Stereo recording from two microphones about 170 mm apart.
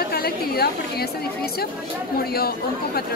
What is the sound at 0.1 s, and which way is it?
Speech, 65° left (ahead or behind).